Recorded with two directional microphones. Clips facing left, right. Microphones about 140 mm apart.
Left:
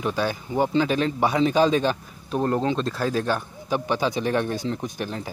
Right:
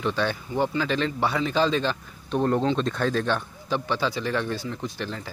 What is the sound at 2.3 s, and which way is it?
Speech, 5° left (ahead or behind).